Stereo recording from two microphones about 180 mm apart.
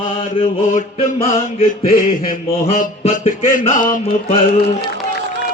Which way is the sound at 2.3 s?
45° left (ahead or behind).